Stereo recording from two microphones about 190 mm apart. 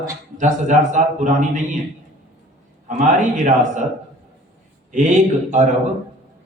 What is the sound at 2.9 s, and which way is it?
Speech, 40° right (ahead or behind).